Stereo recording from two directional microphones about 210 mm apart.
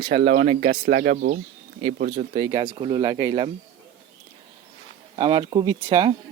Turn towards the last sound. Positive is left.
turn(degrees=-20)  # may be behind; listen again after turning